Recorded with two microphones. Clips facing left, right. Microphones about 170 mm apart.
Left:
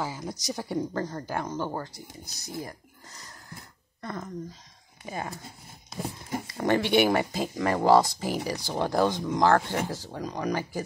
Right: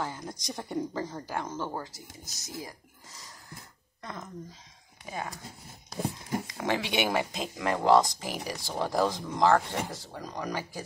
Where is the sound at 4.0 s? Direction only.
5° left (ahead or behind).